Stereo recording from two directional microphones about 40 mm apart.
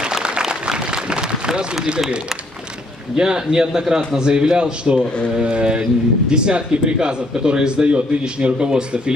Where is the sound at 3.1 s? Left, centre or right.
Centre.